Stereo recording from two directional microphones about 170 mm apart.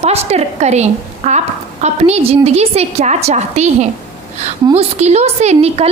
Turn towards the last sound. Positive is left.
turn(degrees=-40)  # may be behind; listen again after turning